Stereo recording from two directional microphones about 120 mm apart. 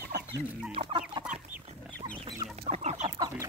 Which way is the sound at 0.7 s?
55° right (ahead or behind).